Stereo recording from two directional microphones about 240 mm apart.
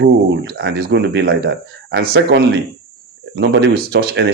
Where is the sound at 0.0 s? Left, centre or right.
Right.